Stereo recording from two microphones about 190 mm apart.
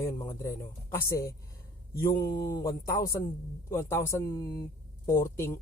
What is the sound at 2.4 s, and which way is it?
Speech, 15° left (ahead or behind).